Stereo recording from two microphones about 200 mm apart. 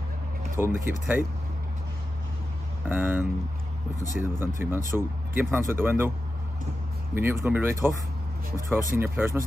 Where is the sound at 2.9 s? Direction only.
10° right (ahead or behind).